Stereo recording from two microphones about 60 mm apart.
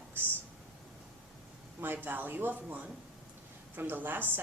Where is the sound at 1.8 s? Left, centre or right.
Right.